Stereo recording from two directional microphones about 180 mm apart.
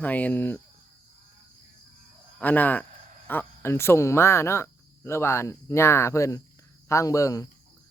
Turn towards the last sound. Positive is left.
turn(degrees=15)  # may be behind; listen again after turning